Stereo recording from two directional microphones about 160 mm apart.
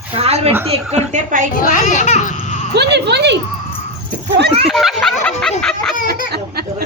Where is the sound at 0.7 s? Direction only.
45° right (ahead or behind).